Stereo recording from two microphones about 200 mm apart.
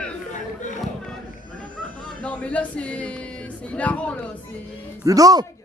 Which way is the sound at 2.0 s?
5° left (ahead or behind).